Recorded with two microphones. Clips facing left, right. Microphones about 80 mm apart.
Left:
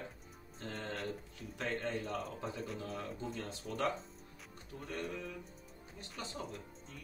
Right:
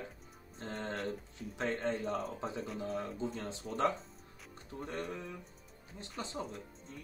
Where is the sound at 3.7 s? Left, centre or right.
Right.